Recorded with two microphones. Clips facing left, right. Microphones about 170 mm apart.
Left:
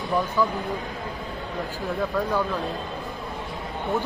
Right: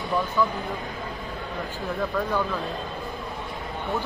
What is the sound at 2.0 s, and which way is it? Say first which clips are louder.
Speech: left 1 dB; 5° left (ahead or behind).